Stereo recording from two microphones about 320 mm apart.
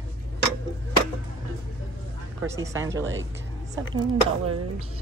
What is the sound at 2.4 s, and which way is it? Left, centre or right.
Speech, centre.